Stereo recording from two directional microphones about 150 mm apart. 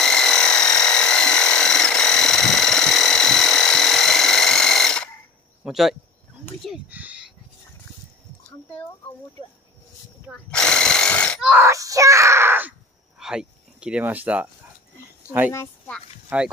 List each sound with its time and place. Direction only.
0.0 s a sound: 5° left (ahead or behind)
5.6 s speech: centre (ahead or behind)
6.9 s a sound: 10° right (ahead or behind)
10.5 s speech: 5° left (ahead or behind)
11.4 s speech: 15° right (ahead or behind)
13.2 s speech: 5° right (ahead or behind)
16.3 s speech: 10° right (ahead or behind)